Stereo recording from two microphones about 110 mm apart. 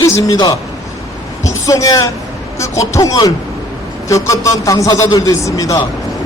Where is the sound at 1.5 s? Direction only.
30° left (ahead or behind).